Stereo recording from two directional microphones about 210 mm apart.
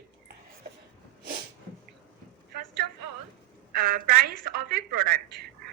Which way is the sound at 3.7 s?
45° right (ahead or behind).